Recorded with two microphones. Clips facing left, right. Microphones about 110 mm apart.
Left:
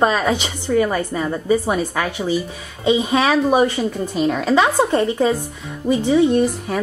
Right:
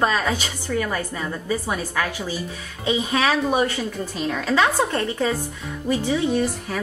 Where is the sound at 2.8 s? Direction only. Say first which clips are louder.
Left 5 dB; 10° left (ahead or behind).